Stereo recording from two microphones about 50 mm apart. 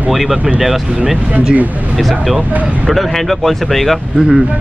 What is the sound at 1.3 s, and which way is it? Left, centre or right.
Speech, right.